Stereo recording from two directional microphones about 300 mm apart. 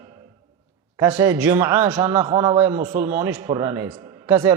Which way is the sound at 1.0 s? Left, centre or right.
Centre.